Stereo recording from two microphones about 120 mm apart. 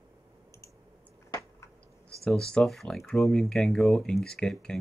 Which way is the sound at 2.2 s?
5° left (ahead or behind).